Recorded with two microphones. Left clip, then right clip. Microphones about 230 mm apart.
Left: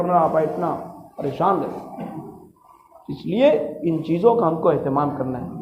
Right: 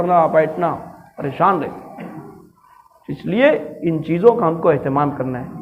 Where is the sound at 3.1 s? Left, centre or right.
Right.